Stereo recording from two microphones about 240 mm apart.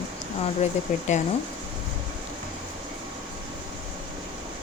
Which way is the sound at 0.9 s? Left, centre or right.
Left.